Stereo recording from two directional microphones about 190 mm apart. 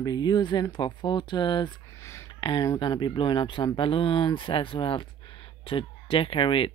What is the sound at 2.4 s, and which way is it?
Speech, 25° left (ahead or behind).